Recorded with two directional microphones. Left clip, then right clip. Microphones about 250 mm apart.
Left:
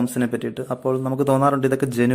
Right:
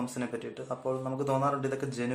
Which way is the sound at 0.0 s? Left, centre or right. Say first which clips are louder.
Left 12 dB; left.